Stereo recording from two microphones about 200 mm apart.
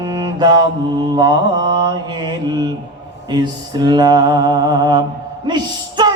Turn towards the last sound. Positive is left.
turn(degrees=-20)  # may be behind; listen again after turning